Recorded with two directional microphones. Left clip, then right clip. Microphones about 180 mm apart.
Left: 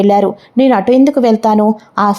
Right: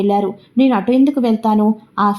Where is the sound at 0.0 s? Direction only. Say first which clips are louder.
Left 6 dB; 35° left (ahead or behind).